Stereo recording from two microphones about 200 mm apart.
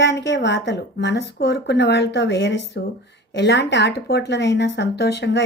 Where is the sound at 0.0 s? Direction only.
60° left (ahead or behind).